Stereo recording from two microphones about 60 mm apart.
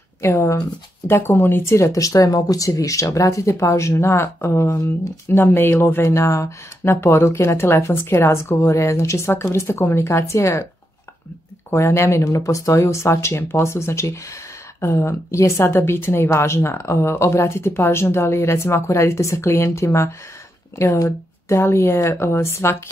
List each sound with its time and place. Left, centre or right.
0.2 s a woman's voice: left
1.8 s a woman's voice: left
5.4 s speech: left
6.0 s a woman's voice: left
11.7 s a woman's voice: left